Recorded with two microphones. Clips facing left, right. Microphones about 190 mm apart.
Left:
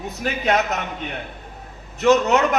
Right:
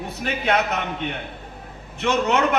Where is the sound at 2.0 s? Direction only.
40° left (ahead or behind).